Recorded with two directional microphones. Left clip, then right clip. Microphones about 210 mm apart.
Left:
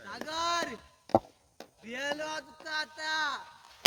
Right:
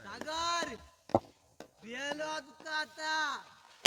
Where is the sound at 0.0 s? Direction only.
5° left (ahead or behind).